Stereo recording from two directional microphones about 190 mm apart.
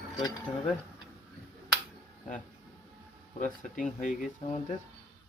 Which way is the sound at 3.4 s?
40° left (ahead or behind).